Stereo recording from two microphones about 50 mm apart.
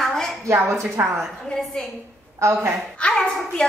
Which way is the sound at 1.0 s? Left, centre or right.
Right.